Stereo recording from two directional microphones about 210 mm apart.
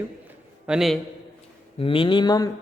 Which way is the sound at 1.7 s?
25° left (ahead or behind).